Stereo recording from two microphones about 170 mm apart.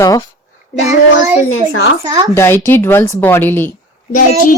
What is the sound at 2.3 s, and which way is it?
Speech, 15° left (ahead or behind).